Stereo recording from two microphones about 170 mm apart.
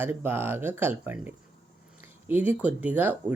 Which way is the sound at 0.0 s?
10° right (ahead or behind).